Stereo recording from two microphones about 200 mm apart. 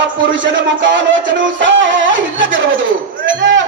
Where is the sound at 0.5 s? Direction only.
65° right (ahead or behind).